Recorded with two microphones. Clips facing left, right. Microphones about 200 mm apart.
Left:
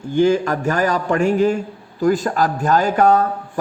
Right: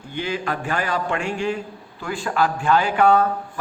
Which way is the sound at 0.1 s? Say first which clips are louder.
Left 11 dB; 45° left (ahead or behind).